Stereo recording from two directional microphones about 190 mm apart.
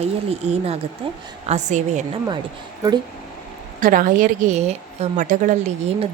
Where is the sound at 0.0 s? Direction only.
35° right (ahead or behind).